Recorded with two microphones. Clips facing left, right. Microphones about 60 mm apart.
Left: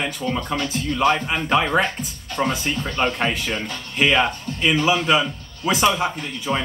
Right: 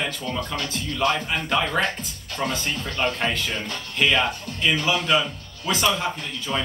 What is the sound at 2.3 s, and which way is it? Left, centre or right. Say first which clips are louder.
Speech: left 4 dB; centre.